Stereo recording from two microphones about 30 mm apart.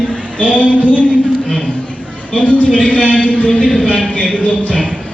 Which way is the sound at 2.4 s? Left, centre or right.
Left.